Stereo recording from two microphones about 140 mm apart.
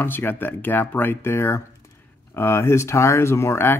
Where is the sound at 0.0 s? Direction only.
15° left (ahead or behind).